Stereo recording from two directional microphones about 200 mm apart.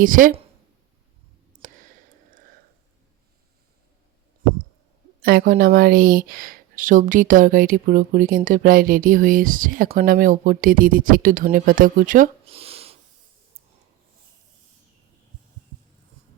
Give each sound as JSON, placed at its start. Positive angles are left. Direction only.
{"t": 0.0, "sound": "a woman's voice", "side_deg": -45}
{"t": 1.6, "sound": "a sound", "side_deg": -40}
{"t": 5.2, "sound": "a woman's voice", "side_deg": -45}